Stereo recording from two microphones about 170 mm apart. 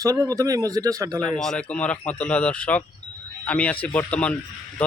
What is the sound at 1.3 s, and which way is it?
A man's voice, 5° left (ahead or behind).